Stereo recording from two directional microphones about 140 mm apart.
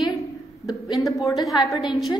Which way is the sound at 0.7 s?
30° left (ahead or behind).